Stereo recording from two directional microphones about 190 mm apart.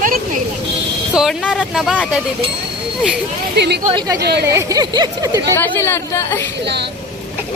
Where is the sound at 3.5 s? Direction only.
60° right (ahead or behind).